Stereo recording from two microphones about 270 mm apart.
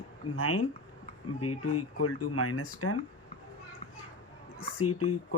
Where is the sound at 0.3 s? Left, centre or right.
Left.